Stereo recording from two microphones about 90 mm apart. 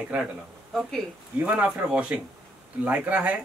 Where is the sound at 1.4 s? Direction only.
15° right (ahead or behind).